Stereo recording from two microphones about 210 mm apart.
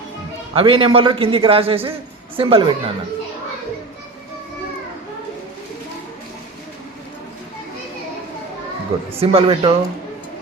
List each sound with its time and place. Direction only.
0.5 s a man's voice: 25° right (ahead or behind)
9.2 s a man's voice: 25° right (ahead or behind)